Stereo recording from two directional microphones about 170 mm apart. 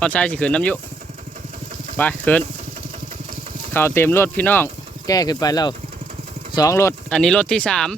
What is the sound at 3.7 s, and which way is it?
Speech, 15° left (ahead or behind).